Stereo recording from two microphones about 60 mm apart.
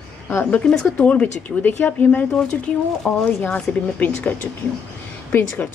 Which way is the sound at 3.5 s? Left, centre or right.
Left.